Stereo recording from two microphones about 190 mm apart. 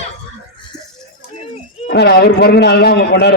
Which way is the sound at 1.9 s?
60° left (ahead or behind).